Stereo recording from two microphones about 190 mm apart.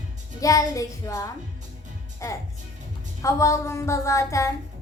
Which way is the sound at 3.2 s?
15° left (ahead or behind).